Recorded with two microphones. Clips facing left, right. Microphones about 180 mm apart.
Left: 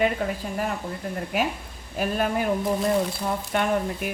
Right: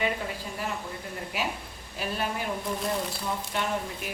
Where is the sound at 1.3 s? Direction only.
50° left (ahead or behind).